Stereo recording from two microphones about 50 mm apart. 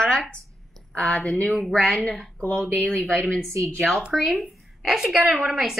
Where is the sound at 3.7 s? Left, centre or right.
Centre.